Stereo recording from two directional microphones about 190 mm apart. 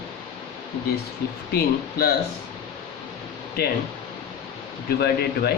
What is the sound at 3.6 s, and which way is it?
Speech, 50° left (ahead or behind).